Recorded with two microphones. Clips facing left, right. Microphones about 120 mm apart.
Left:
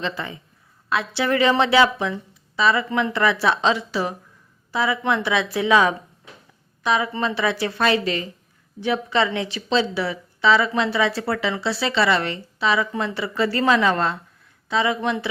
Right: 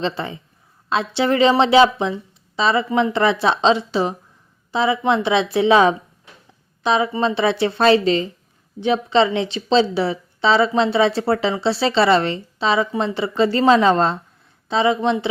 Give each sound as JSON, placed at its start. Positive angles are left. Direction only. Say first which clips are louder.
{"t": 0.0, "sound": "a woman's voice", "louder": "right 4 dB", "side_deg": -30}